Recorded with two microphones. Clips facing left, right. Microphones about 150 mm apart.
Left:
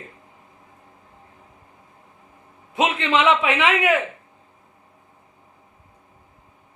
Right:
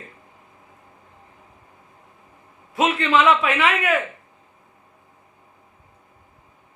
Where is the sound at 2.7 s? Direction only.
20° left (ahead or behind).